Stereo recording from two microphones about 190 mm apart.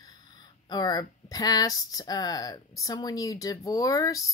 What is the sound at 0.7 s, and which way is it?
Speech, 20° left (ahead or behind).